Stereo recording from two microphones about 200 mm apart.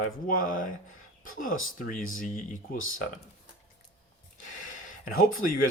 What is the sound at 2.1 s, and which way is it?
Speech, 40° left (ahead or behind).